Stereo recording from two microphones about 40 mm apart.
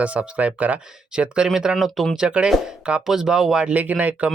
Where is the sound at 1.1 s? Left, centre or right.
Right.